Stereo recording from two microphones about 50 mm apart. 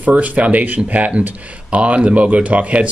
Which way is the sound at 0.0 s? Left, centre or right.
Right.